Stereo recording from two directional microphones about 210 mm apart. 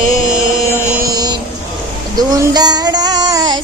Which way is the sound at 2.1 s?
20° right (ahead or behind).